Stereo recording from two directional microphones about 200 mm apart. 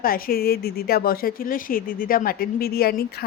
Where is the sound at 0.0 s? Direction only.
50° left (ahead or behind).